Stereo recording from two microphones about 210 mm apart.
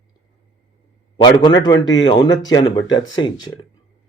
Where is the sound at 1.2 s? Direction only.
20° left (ahead or behind).